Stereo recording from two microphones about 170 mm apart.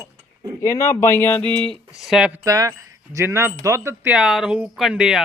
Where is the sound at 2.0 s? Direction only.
5° right (ahead or behind).